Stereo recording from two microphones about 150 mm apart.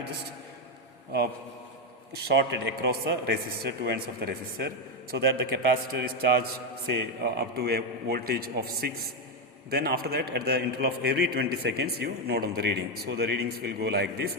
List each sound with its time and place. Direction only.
2.8 s a man's voice: 90° right